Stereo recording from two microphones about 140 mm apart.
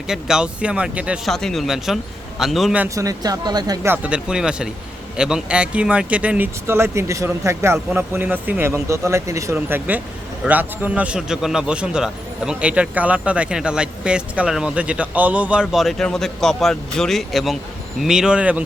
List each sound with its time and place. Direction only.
0.1 s speech: 5° right (ahead or behind)
2.9 s speech: 25° right (ahead or behind)
3.8 s a man's voice: 10° right (ahead or behind)